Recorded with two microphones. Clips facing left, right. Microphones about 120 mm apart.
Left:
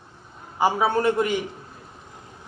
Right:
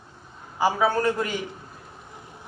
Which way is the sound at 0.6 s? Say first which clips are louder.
Left 1 dB; 20° left (ahead or behind).